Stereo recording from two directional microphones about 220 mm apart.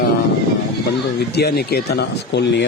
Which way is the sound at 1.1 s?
45° left (ahead or behind).